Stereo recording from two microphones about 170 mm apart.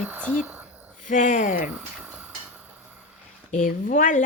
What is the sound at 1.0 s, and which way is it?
Speech, 50° left (ahead or behind).